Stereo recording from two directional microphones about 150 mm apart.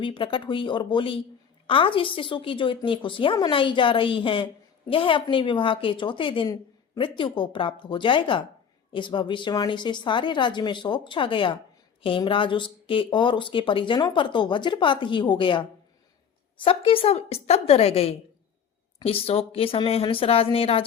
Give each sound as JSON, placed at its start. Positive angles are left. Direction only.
{"t": 0.0, "sound": "speech", "side_deg": 35}